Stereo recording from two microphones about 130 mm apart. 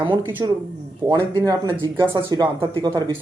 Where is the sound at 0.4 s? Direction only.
30° right (ahead or behind).